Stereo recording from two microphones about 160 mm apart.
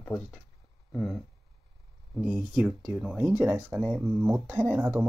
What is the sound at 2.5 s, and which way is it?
Speech, 10° right (ahead or behind).